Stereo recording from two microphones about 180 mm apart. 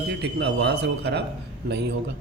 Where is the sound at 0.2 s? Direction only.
65° right (ahead or behind).